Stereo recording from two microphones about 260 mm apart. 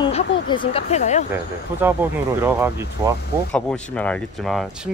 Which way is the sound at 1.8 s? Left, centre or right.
Centre.